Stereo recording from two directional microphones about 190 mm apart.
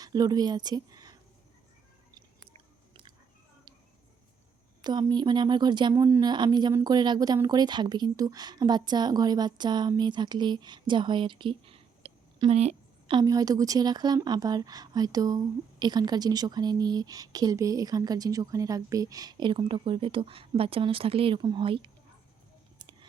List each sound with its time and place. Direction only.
0.0 s a woman's voice: 20° right (ahead or behind)
4.8 s speech: 20° right (ahead or behind)
22.8 s a sound: 25° right (ahead or behind)